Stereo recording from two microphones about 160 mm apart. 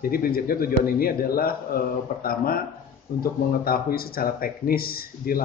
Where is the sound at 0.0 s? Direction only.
65° left (ahead or behind).